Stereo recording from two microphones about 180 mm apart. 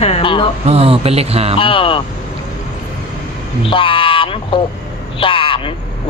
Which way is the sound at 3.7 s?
30° left (ahead or behind).